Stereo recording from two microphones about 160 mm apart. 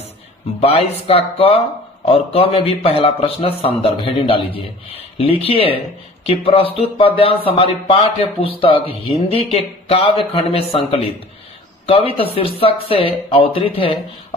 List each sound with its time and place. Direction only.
0.6 s a man's voice: 40° left (ahead or behind)